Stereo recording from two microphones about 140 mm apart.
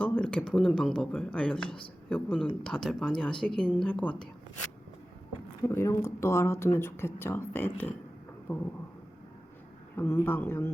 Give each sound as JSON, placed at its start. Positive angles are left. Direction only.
{"t": 0.0, "sound": "a woman's voice", "side_deg": 10}
{"t": 5.6, "sound": "speech", "side_deg": 20}
{"t": 9.9, "sound": "speech", "side_deg": 15}